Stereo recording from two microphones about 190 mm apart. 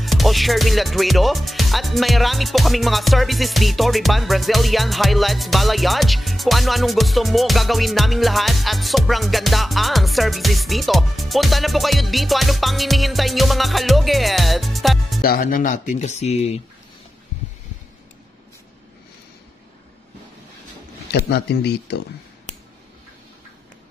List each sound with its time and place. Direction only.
0.0 s speech: centre (ahead or behind)
15.2 s speech: 50° left (ahead or behind); by 16.6 s 35° left (ahead or behind)
21.3 s speech: 60° left (ahead or behind)